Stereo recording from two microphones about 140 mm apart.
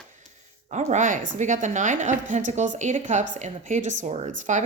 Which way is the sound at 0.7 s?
55° right (ahead or behind).